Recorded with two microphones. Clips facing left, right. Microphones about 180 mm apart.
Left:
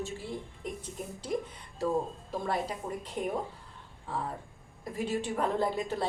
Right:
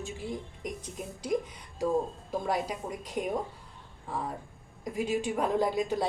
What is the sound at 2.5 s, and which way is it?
Speech, 15° right (ahead or behind).